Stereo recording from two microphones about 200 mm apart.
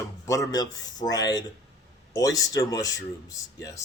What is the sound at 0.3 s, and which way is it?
Speech, 20° left (ahead or behind).